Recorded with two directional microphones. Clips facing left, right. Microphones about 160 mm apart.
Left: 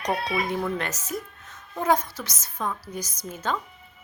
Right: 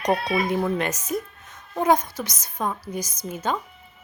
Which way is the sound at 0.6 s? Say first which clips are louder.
Right 4 dB; 15° right (ahead or behind).